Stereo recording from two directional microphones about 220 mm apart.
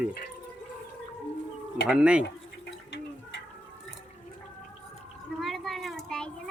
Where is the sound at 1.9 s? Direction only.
5° right (ahead or behind).